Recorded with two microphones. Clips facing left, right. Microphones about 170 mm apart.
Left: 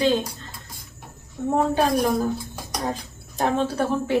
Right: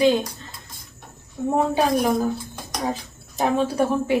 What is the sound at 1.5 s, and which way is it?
A woman's voice, 10° right (ahead or behind).